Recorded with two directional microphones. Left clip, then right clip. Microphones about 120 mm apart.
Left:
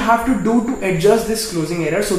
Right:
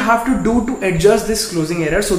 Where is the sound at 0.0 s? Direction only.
15° right (ahead or behind).